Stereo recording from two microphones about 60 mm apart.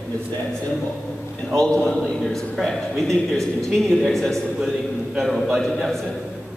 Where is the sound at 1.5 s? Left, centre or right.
Centre.